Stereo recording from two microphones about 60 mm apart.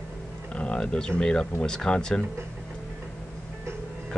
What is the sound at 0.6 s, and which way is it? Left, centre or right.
Speech, centre.